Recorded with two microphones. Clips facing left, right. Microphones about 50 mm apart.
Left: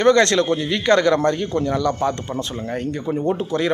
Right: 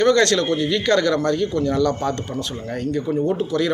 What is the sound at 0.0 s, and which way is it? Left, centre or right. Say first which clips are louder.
A man's voice: left 1 dB; left.